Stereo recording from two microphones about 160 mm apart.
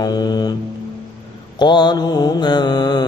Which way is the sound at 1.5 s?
25° left (ahead or behind).